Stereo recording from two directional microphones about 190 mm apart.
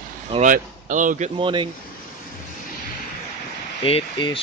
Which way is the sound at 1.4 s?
25° right (ahead or behind).